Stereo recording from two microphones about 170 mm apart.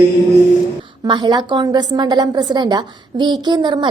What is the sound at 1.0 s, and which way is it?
A woman's voice, 25° right (ahead or behind).